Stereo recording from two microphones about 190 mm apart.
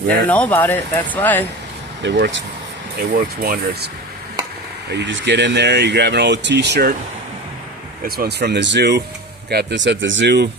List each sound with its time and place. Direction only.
0.3 s speech: 10° left (ahead or behind)
2.0 s speech: 70° right (ahead or behind)
3.1 s speech: 50° right (ahead or behind)
4.9 s speech: 65° right (ahead or behind)
8.0 s speech: 50° right (ahead or behind)